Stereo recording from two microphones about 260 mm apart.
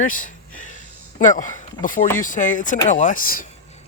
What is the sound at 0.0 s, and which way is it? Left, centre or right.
Speech, left.